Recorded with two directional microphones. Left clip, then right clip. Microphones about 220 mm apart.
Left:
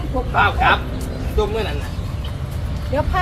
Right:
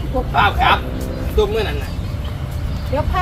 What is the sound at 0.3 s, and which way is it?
Speech, 50° right (ahead or behind).